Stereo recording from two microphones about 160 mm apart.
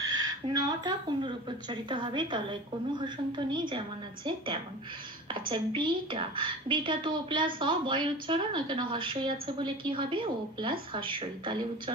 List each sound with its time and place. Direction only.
0.0 s a woman's voice: 25° right (ahead or behind)